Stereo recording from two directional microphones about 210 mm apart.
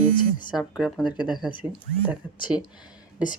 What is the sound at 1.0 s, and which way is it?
Speech, 20° left (ahead or behind).